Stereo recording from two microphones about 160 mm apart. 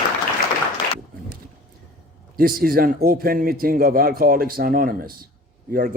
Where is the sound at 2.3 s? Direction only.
65° right (ahead or behind).